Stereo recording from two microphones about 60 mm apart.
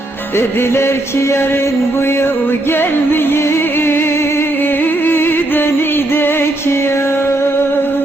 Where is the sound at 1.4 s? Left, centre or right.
Left.